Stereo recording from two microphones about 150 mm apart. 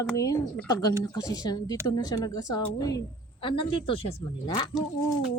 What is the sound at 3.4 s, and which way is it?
A woman's voice, 35° left (ahead or behind).